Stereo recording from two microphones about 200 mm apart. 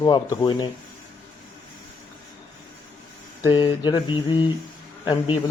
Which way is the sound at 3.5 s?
25° left (ahead or behind).